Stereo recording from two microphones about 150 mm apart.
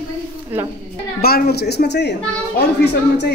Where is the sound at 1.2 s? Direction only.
90° left.